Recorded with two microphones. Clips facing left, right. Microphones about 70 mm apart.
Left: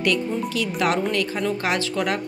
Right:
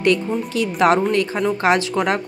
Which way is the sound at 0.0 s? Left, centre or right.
Right.